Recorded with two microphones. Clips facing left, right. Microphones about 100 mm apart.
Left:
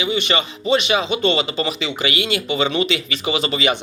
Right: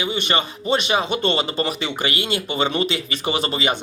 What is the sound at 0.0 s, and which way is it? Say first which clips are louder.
A man's voice: left 2 dB; 45° right (ahead or behind).